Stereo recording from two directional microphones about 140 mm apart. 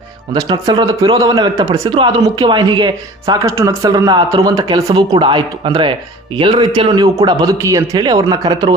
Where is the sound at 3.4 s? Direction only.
20° right (ahead or behind).